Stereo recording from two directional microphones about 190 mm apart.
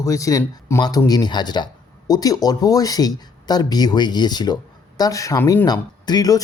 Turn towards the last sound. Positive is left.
turn(degrees=20)  # may be behind; listen again after turning